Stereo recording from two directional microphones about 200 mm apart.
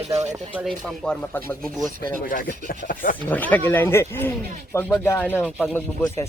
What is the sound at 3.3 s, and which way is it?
Speech, 10° left (ahead or behind).